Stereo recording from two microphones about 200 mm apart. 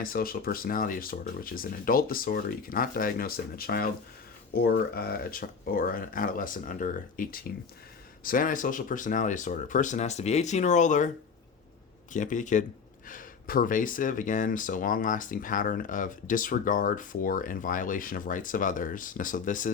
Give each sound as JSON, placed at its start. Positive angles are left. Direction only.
{"t": 0.0, "sound": "speech", "side_deg": 45}
{"t": 12.1, "sound": "speech", "side_deg": 40}